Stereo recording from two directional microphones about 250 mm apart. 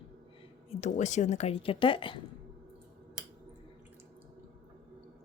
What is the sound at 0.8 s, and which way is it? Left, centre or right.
Speech, left.